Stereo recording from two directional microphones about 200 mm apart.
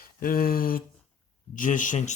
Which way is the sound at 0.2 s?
45° left (ahead or behind).